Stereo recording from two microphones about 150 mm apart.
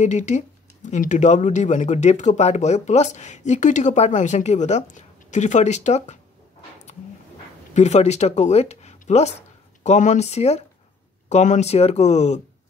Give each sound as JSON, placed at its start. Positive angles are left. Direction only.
{"t": 0.0, "sound": "speech", "side_deg": 50}
{"t": 7.7, "sound": "speech", "side_deg": 50}